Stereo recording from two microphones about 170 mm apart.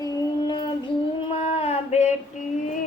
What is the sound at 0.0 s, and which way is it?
Female singing, 25° left (ahead or behind).